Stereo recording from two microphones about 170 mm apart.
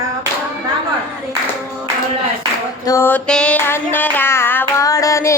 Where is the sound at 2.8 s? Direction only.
15° left (ahead or behind).